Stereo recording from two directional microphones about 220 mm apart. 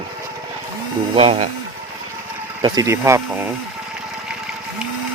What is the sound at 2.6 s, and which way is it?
Speech, 15° right (ahead or behind).